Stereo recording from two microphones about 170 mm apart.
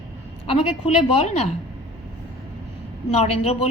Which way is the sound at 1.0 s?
35° left (ahead or behind).